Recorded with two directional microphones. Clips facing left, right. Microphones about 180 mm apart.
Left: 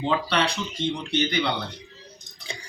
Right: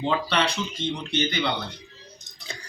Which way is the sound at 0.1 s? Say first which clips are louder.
Left 1 dB; 10° left (ahead or behind).